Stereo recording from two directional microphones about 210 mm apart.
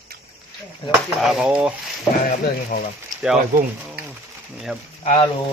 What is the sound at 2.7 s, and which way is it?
Speech, 40° left (ahead or behind).